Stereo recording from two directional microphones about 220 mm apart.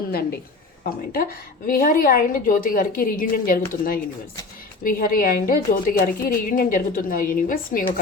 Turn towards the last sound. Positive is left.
turn(degrees=40)  # may be behind; listen again after turning